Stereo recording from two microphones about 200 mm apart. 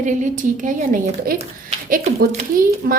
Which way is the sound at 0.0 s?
40° right (ahead or behind).